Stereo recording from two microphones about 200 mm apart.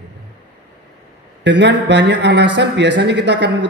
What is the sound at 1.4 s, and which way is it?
A man's voice, 60° right (ahead or behind).